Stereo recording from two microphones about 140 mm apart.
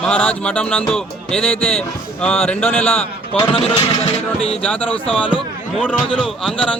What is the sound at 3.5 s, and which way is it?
Speech, 40° left (ahead or behind).